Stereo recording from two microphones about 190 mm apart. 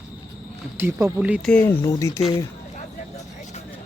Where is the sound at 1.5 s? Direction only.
10° left (ahead or behind).